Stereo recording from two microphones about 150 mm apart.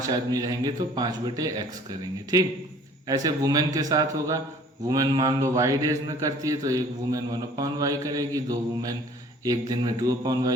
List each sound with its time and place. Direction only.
0.0 s a man's voice: 25° right (ahead or behind)